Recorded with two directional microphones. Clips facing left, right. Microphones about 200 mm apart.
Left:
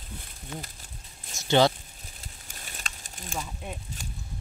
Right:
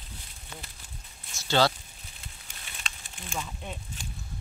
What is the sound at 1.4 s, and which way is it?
Speech, 20° left (ahead or behind).